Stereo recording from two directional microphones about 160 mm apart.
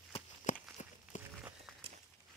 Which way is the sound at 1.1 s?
50° left (ahead or behind).